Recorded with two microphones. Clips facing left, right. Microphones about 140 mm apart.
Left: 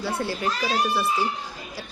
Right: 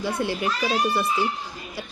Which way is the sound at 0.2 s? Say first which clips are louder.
Right 2 dB; 15° right (ahead or behind).